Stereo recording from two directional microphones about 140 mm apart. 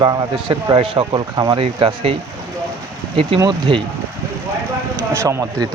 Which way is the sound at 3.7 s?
40° right (ahead or behind).